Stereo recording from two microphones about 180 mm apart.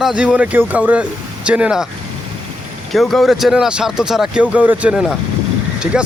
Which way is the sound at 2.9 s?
Centre (ahead or behind).